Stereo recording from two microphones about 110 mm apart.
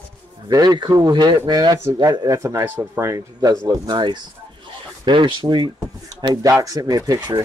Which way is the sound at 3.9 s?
45° right (ahead or behind).